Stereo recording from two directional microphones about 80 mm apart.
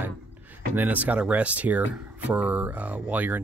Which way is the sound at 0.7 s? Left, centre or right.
Centre.